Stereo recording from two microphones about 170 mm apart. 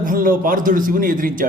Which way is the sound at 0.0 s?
55° right (ahead or behind).